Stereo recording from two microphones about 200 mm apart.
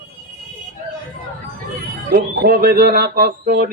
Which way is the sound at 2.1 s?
50° right (ahead or behind).